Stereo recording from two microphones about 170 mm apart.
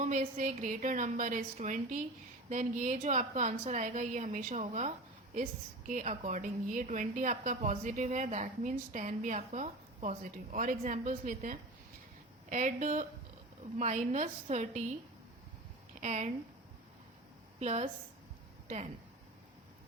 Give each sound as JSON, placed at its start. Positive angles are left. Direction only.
{"t": 0.0, "sound": "a woman's voice", "side_deg": -50}
{"t": 5.9, "sound": "a woman's voice", "side_deg": -45}
{"t": 16.0, "sound": "speech", "side_deg": -45}
{"t": 17.6, "sound": "a woman's voice", "side_deg": -40}